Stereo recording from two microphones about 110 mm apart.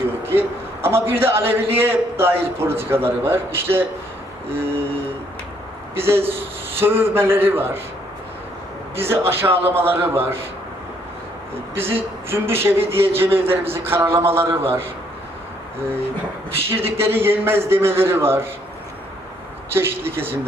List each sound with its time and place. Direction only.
0.3 s a man's voice: 20° right (ahead or behind)
5.9 s a man's voice: 20° right (ahead or behind)
9.0 s a man's voice: 20° right (ahead or behind)
11.8 s a man's voice: 20° right (ahead or behind)
16.6 s a man's voice: 20° right (ahead or behind)
19.7 s a man's voice: 20° right (ahead or behind)